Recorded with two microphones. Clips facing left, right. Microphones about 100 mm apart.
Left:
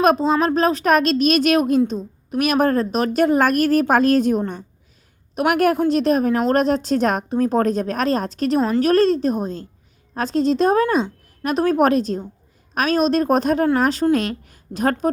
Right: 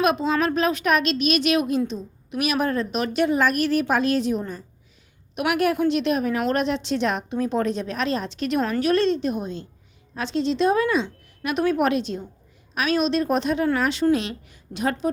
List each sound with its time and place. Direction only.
0.0 s a woman's voice: 40° left (ahead or behind)
5.3 s a woman's voice: 40° left (ahead or behind)